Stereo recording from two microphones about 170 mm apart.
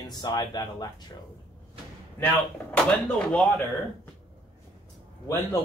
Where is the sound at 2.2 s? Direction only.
10° left (ahead or behind).